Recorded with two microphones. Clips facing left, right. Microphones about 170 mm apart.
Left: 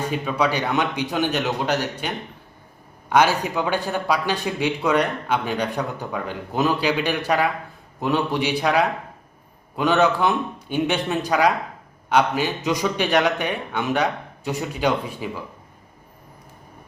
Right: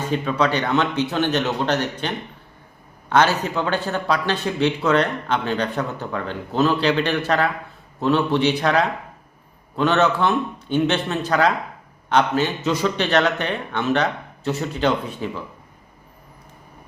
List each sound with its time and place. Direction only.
0.0 s a man's voice: 10° left (ahead or behind)